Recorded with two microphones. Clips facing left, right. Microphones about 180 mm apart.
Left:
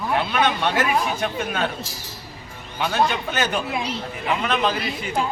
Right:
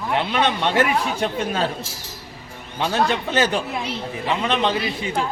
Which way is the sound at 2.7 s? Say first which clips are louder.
Right 1 dB; 30° right (ahead or behind).